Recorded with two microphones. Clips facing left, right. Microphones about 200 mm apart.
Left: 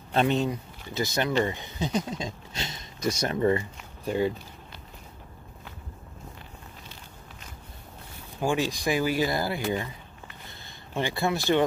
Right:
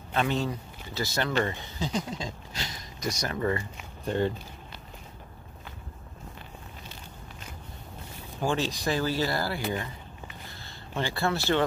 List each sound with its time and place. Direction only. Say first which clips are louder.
0.1 s speech: left 4 dB; 25° left (ahead or behind)
4.0 s speech: left 1 dB; 10° left (ahead or behind)
8.4 s speech: left 2 dB; 10° left (ahead or behind)
11.0 s speech: left 1 dB; 15° left (ahead or behind)